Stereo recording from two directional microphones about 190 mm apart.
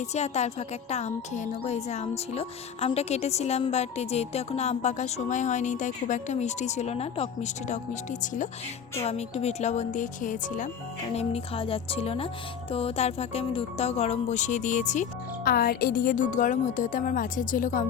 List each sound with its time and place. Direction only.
0.0 s a woman's voice: 35° left (ahead or behind)
9.0 s a woman's voice: 35° left (ahead or behind)
11.1 s a woman's voice: 35° left (ahead or behind)
15.4 s speech: 50° left (ahead or behind)